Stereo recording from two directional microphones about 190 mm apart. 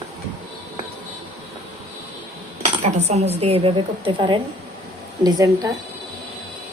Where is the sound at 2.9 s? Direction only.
35° right (ahead or behind); by 5.7 s 20° right (ahead or behind).